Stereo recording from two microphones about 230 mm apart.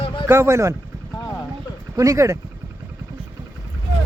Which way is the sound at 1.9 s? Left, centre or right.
Centre.